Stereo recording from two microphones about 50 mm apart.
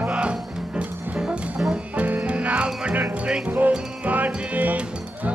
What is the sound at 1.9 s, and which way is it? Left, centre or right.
Music, right.